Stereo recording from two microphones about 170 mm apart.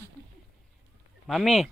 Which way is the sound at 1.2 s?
Centre (ahead or behind).